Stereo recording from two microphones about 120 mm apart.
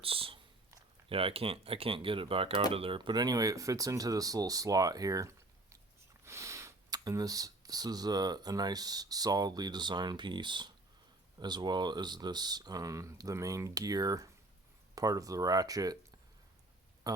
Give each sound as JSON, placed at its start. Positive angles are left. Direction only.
{"t": 0.0, "sound": "speech", "side_deg": -50}
{"t": 17.1, "sound": "speech", "side_deg": -35}